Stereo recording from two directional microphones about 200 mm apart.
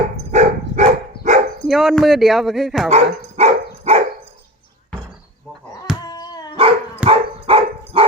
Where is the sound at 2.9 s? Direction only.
35° right (ahead or behind).